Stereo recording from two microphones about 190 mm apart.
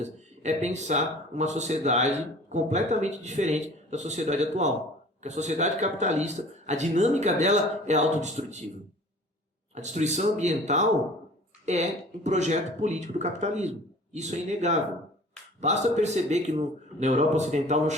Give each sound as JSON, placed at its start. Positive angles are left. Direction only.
{"t": 0.0, "sound": "speech", "side_deg": -40}
{"t": 9.7, "sound": "speech", "side_deg": -40}